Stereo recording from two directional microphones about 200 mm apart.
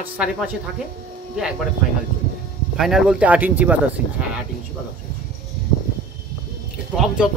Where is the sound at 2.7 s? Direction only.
Centre (ahead or behind).